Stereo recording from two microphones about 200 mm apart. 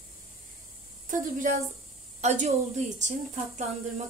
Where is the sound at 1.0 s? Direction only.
40° right (ahead or behind).